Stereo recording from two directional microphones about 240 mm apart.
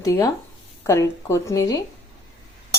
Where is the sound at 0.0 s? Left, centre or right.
Centre.